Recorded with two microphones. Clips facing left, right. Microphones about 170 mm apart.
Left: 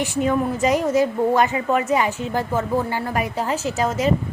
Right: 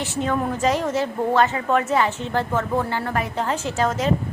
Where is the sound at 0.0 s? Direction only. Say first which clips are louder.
Left 3 dB; 10° left (ahead or behind).